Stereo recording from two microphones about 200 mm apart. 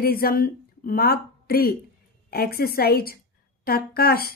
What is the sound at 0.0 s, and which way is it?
A woman's voice, 50° left (ahead or behind).